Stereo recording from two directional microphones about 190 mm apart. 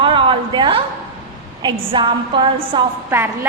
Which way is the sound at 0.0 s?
25° right (ahead or behind).